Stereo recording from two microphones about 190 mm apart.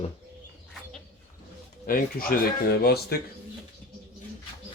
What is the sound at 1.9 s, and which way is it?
Speech, 50° left (ahead or behind).